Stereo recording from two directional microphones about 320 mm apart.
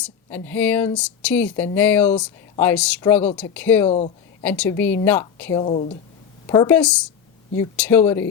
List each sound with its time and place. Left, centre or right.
0.0 s speech: centre
3.8 s speech: centre
4.4 s speech: centre; by 6.0 s left
6.5 s speech: centre